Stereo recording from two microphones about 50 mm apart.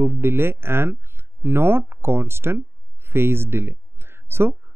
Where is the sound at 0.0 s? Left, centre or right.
Right.